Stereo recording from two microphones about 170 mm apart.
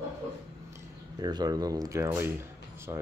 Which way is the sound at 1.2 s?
25° right (ahead or behind).